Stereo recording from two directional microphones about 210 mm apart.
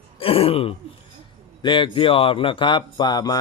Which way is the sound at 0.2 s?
25° left (ahead or behind).